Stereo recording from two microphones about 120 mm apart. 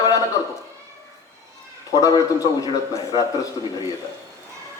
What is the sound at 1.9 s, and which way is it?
A man's voice, 30° left (ahead or behind).